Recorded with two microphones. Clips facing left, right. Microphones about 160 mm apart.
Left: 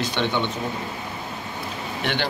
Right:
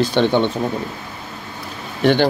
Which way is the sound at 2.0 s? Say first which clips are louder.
Right 12 dB; 40° right (ahead or behind).